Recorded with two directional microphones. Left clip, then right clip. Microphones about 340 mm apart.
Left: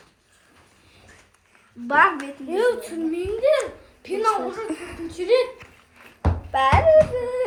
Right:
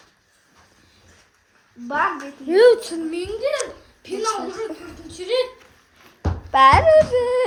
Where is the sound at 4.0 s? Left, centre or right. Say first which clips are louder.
Left 3 dB; centre.